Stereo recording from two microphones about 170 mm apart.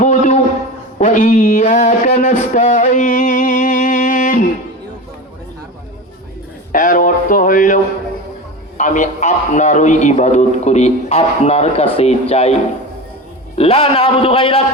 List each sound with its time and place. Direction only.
0.0 s a sound: 45° left (ahead or behind)
6.7 s speech: 50° left (ahead or behind)
8.8 s a man's voice: 45° left (ahead or behind)
13.6 s a man's voice: 35° left (ahead or behind)